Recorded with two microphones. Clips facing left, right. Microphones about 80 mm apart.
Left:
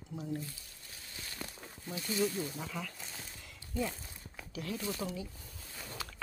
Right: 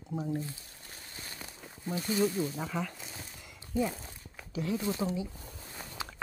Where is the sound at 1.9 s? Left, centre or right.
Right.